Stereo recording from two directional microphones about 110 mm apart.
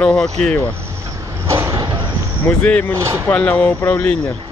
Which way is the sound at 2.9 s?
25° right (ahead or behind).